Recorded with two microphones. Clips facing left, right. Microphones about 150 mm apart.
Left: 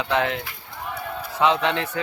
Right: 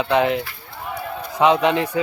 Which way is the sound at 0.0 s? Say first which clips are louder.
Right 5 dB; 15° right (ahead or behind).